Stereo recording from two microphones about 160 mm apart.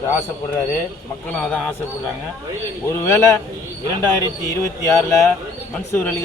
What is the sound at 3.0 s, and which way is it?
Speech, 15° left (ahead or behind).